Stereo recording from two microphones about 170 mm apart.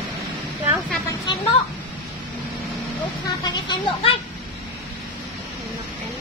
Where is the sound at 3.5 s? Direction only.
25° left (ahead or behind).